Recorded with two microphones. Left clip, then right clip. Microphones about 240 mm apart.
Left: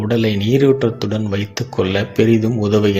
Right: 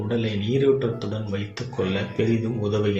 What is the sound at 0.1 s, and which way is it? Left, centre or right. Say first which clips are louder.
Speech: left 9 dB; left.